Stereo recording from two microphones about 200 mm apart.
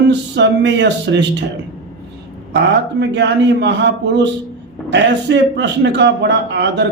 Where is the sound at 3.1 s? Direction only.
60° right (ahead or behind).